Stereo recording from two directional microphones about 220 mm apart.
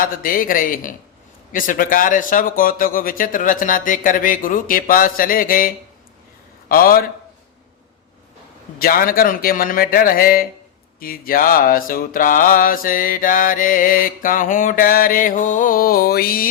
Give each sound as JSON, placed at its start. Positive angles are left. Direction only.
{"t": 0.0, "sound": "mantra", "side_deg": 40}
{"t": 8.8, "sound": "mantra", "side_deg": 40}